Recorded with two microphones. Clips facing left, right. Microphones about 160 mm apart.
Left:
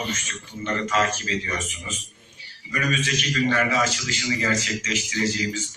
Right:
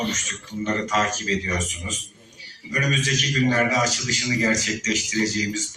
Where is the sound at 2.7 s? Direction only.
40° right (ahead or behind).